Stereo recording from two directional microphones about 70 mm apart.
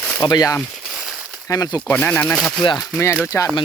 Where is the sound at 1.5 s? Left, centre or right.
Left.